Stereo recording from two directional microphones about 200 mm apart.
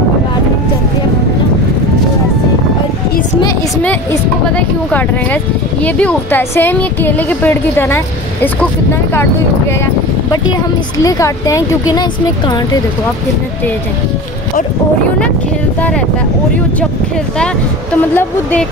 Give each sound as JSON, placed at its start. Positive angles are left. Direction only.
{"t": 3.8, "sound": "speech", "side_deg": 10}
{"t": 11.0, "sound": "speech", "side_deg": 15}
{"t": 18.1, "sound": "speech", "side_deg": 5}